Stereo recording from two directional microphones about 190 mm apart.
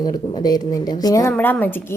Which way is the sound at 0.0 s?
20° left (ahead or behind).